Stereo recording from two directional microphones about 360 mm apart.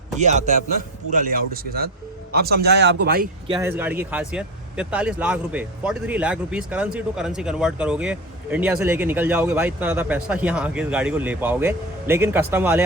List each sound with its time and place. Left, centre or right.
0.2 s a man's voice: centre
3.5 s speech: centre